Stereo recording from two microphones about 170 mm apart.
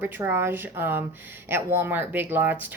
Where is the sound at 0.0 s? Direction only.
15° right (ahead or behind).